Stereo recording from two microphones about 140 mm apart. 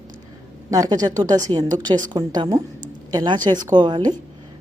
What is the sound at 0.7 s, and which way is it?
Speech, 25° right (ahead or behind).